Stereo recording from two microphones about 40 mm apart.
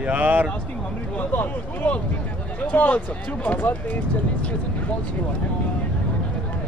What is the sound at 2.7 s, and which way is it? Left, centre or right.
Speech, left.